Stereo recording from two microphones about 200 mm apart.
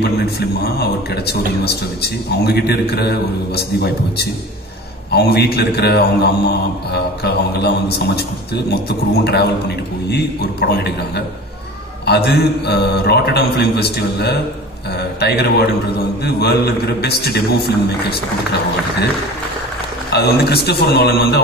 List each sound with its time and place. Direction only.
0.7 s a man's voice: 55° left (ahead or behind)
20.1 s a man's voice: 55° left (ahead or behind)